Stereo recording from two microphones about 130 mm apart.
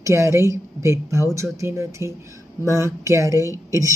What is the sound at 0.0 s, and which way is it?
Speech, 20° right (ahead or behind).